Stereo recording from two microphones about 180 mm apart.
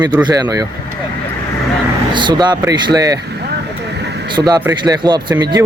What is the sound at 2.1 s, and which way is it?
Speech, 25° right (ahead or behind).